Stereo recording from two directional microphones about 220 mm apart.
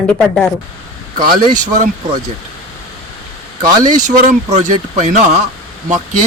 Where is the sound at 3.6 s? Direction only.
35° right (ahead or behind).